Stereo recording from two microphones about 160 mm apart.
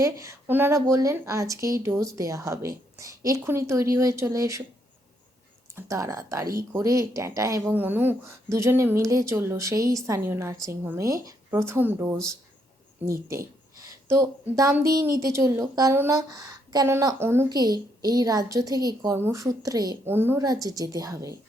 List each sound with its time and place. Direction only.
0.0 s a woman's voice: 20° right (ahead or behind)
5.7 s a woman's voice: 20° right (ahead or behind)